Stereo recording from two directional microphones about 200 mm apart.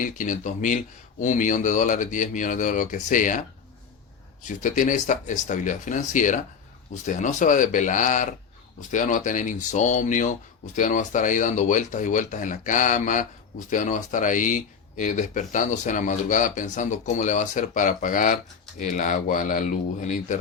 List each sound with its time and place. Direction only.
0.0 s speech: 40° left (ahead or behind)
4.4 s speech: 40° left (ahead or behind)